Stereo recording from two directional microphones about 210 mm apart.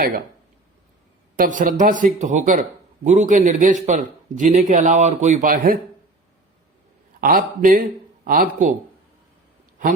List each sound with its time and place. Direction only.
1.4 s a man's voice: 40° right (ahead or behind)
7.2 s speech: 40° right (ahead or behind)